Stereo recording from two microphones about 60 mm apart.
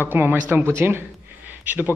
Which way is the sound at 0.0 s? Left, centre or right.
Right.